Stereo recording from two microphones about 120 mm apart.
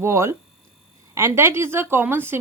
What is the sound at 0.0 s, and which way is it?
Speech, 20° right (ahead or behind).